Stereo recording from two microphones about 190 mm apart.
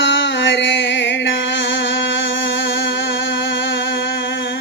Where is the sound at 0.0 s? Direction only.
70° left (ahead or behind).